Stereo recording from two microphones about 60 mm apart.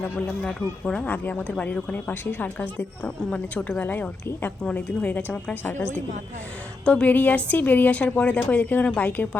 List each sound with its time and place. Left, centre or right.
0.0 s a woman's voice: left
4.6 s a woman's voice: left
5.6 s a woman's voice: left
6.8 s a woman's voice: left